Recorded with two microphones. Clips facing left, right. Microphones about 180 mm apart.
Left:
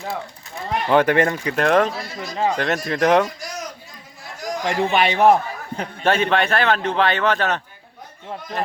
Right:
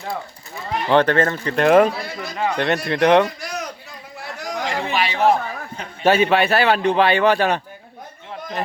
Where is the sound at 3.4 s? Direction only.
60° right (ahead or behind).